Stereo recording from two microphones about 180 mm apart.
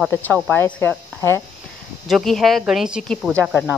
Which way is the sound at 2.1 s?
Centre (ahead or behind).